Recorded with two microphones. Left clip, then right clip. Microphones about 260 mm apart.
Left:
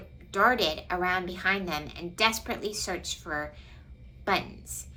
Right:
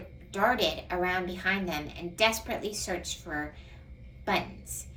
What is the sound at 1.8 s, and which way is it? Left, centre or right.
A woman's voice, centre.